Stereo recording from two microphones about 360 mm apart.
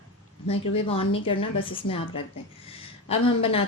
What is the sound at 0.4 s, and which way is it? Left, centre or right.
A woman's voice, centre.